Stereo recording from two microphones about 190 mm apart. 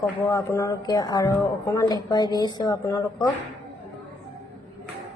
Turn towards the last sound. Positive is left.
turn(degrees=15)  # may be behind; listen again after turning